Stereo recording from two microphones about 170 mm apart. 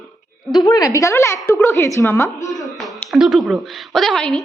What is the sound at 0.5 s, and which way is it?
A woman's voice, 25° left (ahead or behind).